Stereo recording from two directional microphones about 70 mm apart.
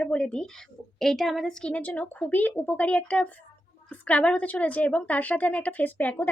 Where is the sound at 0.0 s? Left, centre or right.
Centre.